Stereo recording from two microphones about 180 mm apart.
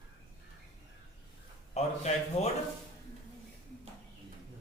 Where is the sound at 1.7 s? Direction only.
35° left (ahead or behind).